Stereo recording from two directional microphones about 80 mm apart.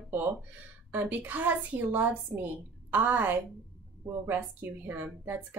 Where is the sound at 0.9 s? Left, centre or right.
Right.